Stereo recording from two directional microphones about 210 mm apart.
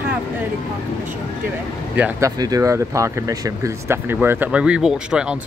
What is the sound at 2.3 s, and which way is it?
Speech, 20° right (ahead or behind).